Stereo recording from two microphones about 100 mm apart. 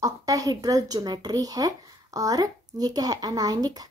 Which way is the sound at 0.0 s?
35° right (ahead or behind).